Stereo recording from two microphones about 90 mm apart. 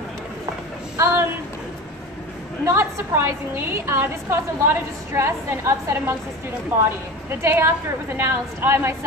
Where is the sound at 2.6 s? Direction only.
25° right (ahead or behind).